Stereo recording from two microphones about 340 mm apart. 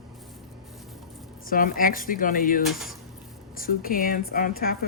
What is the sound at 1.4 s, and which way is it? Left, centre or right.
Speech, left.